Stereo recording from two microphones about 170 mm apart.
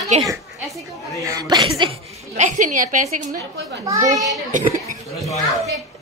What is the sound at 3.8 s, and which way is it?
Speech, 20° right (ahead or behind).